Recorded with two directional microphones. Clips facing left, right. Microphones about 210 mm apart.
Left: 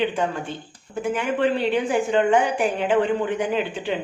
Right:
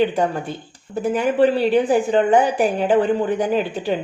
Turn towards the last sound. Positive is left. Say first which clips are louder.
# right 4 dB
turn(degrees=-35)  # may be behind; listen again after turning